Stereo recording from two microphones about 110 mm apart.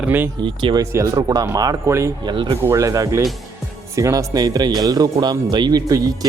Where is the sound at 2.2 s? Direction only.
40° right (ahead or behind).